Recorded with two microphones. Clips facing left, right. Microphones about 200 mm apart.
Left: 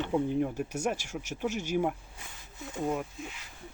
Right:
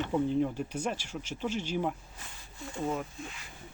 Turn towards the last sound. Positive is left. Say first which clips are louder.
# left 2 dB
turn(degrees=5)  # may be behind; listen again after turning